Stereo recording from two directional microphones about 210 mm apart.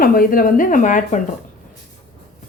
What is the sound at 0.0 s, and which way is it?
Speech, 40° left (ahead or behind).